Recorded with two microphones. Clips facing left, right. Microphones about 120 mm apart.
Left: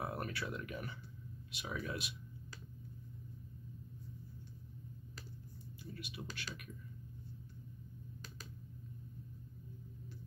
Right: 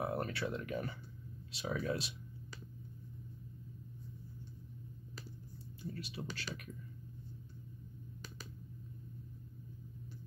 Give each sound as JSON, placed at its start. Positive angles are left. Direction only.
{"t": 0.0, "sound": "speech", "side_deg": -25}
{"t": 5.9, "sound": "speech", "side_deg": -35}